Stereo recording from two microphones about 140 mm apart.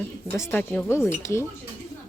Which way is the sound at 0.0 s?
15° left (ahead or behind).